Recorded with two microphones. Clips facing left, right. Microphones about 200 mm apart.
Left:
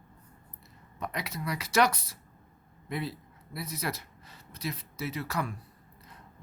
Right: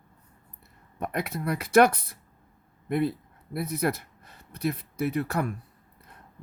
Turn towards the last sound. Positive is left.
turn(degrees=-55)  # may be behind; listen again after turning